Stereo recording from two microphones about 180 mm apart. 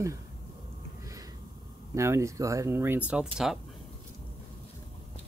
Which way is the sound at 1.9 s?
15° right (ahead or behind).